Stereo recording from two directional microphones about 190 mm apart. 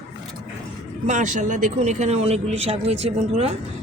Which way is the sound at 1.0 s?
40° right (ahead or behind).